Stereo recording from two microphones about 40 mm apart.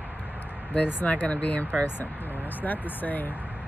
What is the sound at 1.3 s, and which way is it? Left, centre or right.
Speech, left.